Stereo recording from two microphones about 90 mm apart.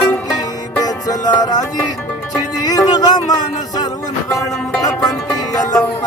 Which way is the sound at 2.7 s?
45° left (ahead or behind).